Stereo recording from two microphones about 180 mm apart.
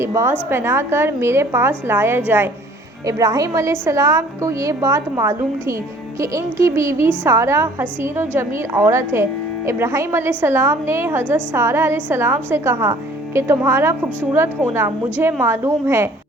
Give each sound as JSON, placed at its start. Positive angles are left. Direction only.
{"t": 0.0, "sound": "a woman's voice", "side_deg": -15}